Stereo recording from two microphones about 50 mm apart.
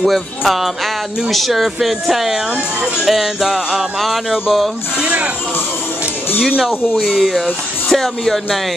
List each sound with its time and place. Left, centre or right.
1.3 s speech: centre
5.0 s speech: right
6.9 s speech: centre
7.2 s speech: centre